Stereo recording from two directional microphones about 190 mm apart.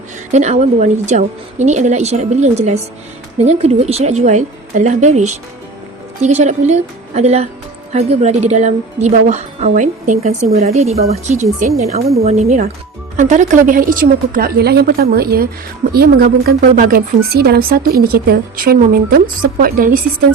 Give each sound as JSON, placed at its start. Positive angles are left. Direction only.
{"t": 0.3, "sound": "a woman's voice", "side_deg": -40}